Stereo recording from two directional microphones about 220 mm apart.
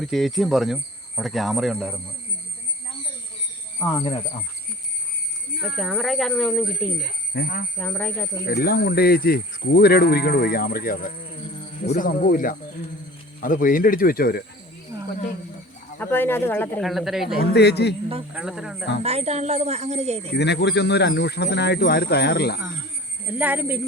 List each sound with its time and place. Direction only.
0.0 s speech: centre (ahead or behind)
3.8 s speech: 15° left (ahead or behind)
5.6 s speech: centre (ahead or behind)
7.0 s speech: 45° left (ahead or behind)
7.8 s speech: 5° left (ahead or behind)
8.4 s speech: 45° left (ahead or behind)
16.0 s speech: 10° left (ahead or behind)
17.4 s speech: 50° left (ahead or behind)
18.3 s speech: 5° right (ahead or behind)
19.0 s a woman's voice: 30° right (ahead or behind)
20.3 s speech: 50° left (ahead or behind)
23.3 s speech: 10° right (ahead or behind)